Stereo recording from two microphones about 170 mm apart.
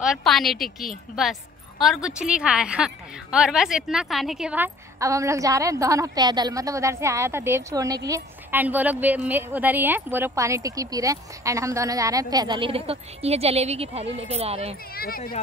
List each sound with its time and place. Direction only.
0.0 s a woman's voice: centre (ahead or behind)
5.0 s a woman's voice: 20° right (ahead or behind); by 14.8 s 35° right (ahead or behind)
15.0 s speech: 60° left (ahead or behind)